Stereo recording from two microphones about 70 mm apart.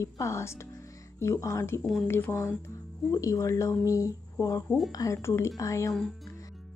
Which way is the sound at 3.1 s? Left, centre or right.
Left.